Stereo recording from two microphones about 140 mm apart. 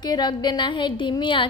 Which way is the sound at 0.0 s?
30° left (ahead or behind).